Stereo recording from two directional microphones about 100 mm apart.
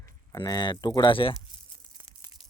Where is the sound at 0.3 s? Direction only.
45° left (ahead or behind).